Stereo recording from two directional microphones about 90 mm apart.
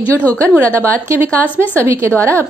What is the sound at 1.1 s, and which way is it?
Speech, 25° right (ahead or behind).